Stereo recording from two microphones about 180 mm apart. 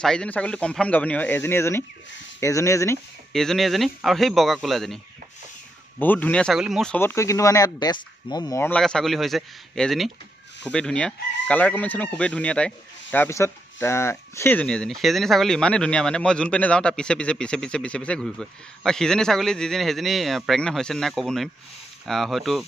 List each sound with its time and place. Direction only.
0.0 s speech: 5° left (ahead or behind)
3.3 s speech: centre (ahead or behind)